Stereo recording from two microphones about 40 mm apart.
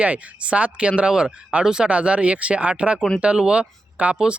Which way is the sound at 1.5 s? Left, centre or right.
Right.